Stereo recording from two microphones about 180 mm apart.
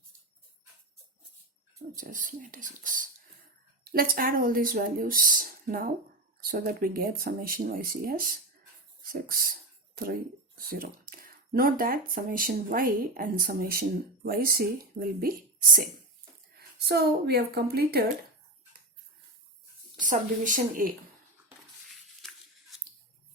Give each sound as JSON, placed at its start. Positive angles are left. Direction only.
{"t": 2.0, "sound": "speech", "side_deg": -45}
{"t": 20.0, "sound": "speech", "side_deg": -45}
{"t": 21.8, "sound": "a sound", "side_deg": 0}